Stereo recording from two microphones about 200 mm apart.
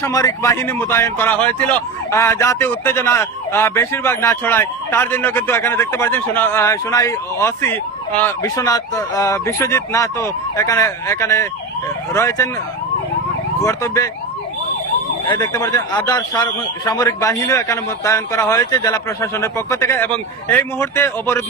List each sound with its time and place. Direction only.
0.0 s speech: 15° left (ahead or behind)
13.6 s speech: 15° left (ahead or behind)
15.3 s speech: 20° left (ahead or behind)